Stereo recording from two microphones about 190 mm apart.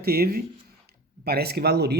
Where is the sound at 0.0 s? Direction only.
55° right (ahead or behind).